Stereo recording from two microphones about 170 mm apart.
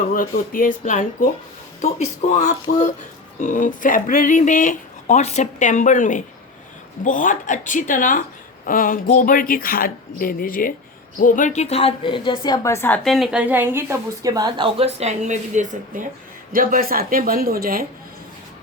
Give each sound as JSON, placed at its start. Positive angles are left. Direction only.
{"t": 0.1, "sound": "a woman's voice", "side_deg": 55}
{"t": 13.1, "sound": "a woman's voice", "side_deg": 0}
{"t": 16.5, "sound": "speech", "side_deg": -55}